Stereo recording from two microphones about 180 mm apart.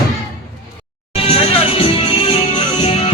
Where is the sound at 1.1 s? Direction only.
35° left (ahead or behind).